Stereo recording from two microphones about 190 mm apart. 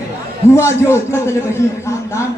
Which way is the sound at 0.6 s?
15° left (ahead or behind).